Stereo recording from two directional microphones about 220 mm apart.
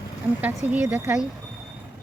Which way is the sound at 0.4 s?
5° right (ahead or behind).